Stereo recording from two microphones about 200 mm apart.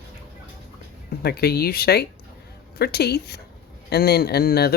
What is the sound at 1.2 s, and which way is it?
Speech, 50° left (ahead or behind).